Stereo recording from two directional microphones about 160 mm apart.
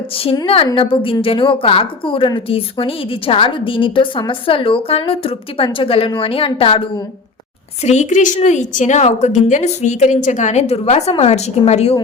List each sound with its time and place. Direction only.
0.2 s a woman's voice: 35° left (ahead or behind)
7.9 s a woman's voice: 50° left (ahead or behind)